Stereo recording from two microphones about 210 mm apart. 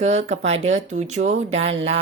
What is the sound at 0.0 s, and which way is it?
Speech, 30° right (ahead or behind).